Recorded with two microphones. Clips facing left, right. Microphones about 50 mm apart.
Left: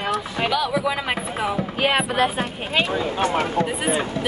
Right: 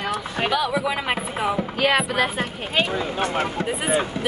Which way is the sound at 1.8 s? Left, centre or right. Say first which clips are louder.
Even; left.